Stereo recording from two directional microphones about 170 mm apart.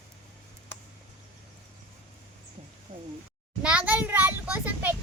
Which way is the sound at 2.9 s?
50° right (ahead or behind).